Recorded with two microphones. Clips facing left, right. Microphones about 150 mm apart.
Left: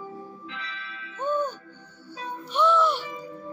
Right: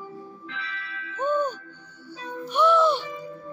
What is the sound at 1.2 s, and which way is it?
Speech, 20° right (ahead or behind).